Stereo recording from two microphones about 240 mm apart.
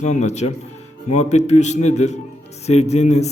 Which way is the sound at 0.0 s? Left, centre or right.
Left.